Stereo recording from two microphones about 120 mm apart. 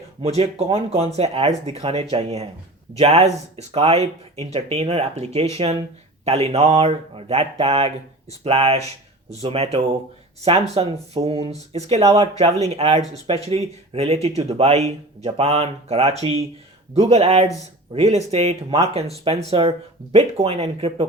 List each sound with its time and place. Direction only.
0.2 s speech: 60° right (ahead or behind)